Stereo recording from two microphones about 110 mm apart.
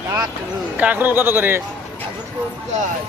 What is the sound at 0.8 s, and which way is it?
Speech, 15° right (ahead or behind).